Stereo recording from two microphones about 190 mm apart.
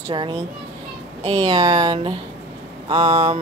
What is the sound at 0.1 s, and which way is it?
Speech, 25° right (ahead or behind).